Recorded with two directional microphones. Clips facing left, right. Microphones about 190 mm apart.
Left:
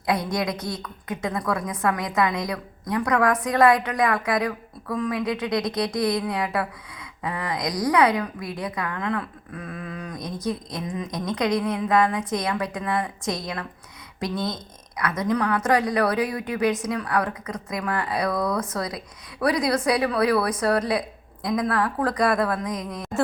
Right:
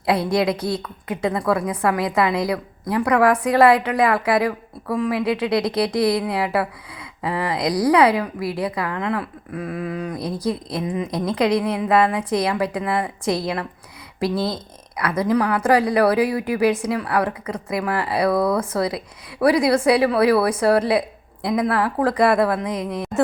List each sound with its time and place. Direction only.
0.0 s a woman's voice: 30° right (ahead or behind)